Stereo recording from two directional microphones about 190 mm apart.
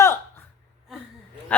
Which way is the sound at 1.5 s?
5° left (ahead or behind).